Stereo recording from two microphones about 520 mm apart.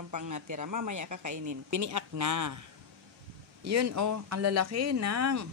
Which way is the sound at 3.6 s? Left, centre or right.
Right.